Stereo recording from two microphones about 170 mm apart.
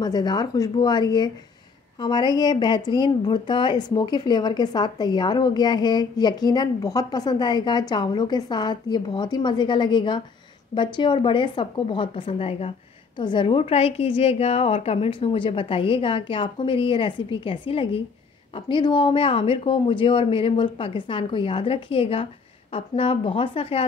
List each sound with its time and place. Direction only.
0.0 s speech: 25° left (ahead or behind)